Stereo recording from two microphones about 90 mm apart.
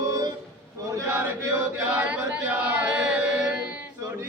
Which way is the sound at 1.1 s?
20° right (ahead or behind).